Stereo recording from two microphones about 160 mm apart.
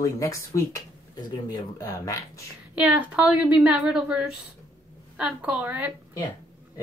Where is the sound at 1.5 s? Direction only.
20° left (ahead or behind).